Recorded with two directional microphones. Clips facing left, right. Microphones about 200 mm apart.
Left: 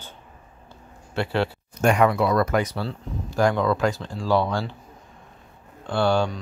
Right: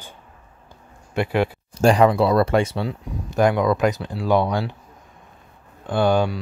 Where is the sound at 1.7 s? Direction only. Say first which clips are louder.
Right 4 dB; 30° right (ahead or behind); by 4.7 s 15° right (ahead or behind).